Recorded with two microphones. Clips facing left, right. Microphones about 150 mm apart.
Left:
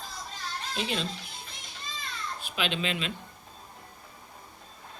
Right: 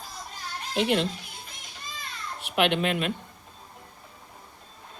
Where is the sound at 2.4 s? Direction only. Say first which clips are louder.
Right 8 dB; 70° right (ahead or behind).